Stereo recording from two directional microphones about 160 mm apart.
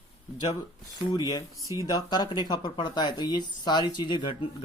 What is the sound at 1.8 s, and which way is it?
A man's voice, 25° left (ahead or behind).